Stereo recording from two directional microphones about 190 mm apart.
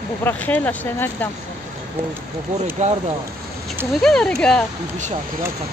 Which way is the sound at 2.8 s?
40° right (ahead or behind).